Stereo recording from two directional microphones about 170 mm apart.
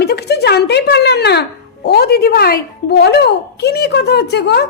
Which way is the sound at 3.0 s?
75° left (ahead or behind).